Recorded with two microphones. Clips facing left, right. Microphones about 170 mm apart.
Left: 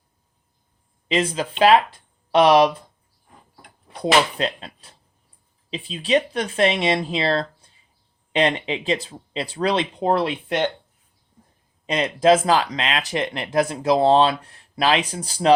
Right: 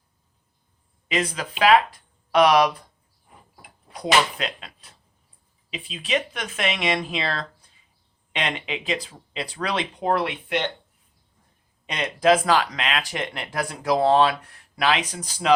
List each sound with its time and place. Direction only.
1.0 s speech: 30° left (ahead or behind)
4.0 s speech: 30° left (ahead or behind)
11.9 s speech: 30° left (ahead or behind)